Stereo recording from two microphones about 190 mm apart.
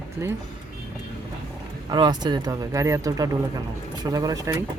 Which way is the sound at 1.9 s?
20° right (ahead or behind).